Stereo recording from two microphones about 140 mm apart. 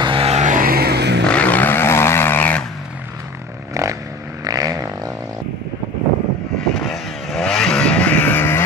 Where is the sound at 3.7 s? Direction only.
25° right (ahead or behind).